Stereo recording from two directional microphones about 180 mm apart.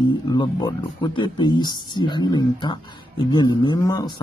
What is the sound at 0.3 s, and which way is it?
Speech, 25° left (ahead or behind).